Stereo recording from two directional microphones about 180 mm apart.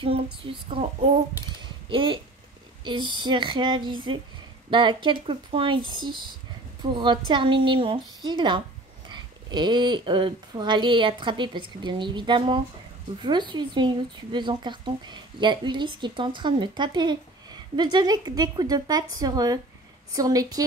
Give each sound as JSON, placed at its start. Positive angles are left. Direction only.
{"t": 0.0, "sound": "child singing", "side_deg": -30}
{"t": 1.9, "sound": "speech", "side_deg": -25}